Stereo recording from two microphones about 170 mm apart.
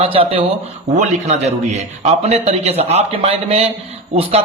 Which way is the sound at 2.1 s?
40° right (ahead or behind).